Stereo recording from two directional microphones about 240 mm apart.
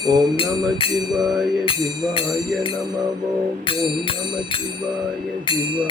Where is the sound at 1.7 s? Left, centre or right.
Left.